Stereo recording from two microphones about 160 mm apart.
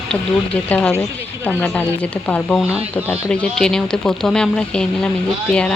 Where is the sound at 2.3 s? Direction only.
10° left (ahead or behind).